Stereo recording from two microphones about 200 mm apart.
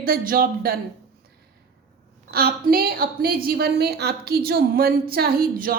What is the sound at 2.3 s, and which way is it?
A woman's voice, 50° right (ahead or behind).